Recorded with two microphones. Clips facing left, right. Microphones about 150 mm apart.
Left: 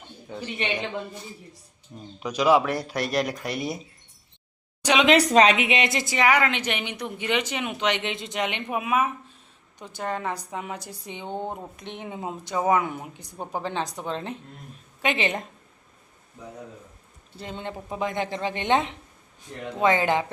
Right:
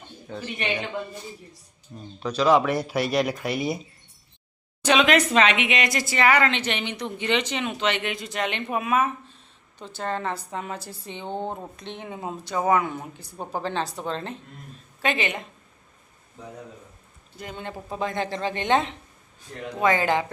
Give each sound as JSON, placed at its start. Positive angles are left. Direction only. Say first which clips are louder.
{"t": 0.4, "sound": "speech", "louder": "even", "side_deg": -10}
{"t": 1.9, "sound": "speech", "louder": "right 2 dB", "side_deg": 20}
{"t": 4.8, "sound": "speech", "louder": "right 1 dB", "side_deg": 15}
{"t": 5.0, "sound": "a woman's voice", "louder": "left 3 dB", "side_deg": 35}
{"t": 17.3, "sound": "a woman's voice", "louder": "left 1 dB", "side_deg": 25}